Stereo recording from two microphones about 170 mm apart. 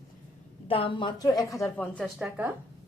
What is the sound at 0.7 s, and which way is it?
Speech, 30° left (ahead or behind).